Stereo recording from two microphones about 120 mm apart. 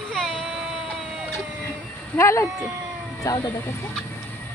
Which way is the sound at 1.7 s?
25° left (ahead or behind).